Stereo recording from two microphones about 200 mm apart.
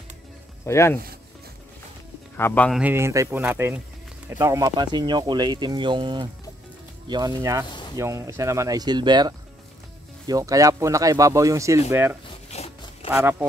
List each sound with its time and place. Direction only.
0.7 s speech: 15° left (ahead or behind)
2.3 s speech: 10° left (ahead or behind)
2.8 s speech: 10° right (ahead or behind)
12.4 s zipper: 30° left (ahead or behind)
13.1 s speech: 10° right (ahead or behind)